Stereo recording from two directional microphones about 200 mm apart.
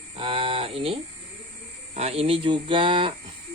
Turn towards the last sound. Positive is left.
turn(degrees=-25)  # may be behind; listen again after turning